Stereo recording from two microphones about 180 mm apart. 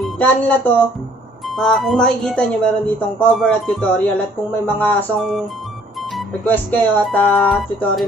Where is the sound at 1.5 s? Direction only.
Centre (ahead or behind).